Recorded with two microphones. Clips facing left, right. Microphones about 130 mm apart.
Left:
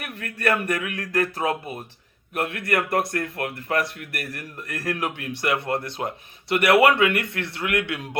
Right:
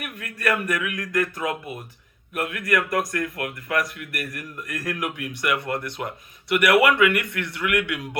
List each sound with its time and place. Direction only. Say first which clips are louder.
0.0 s speech: left 1 dB; 35° left (ahead or behind)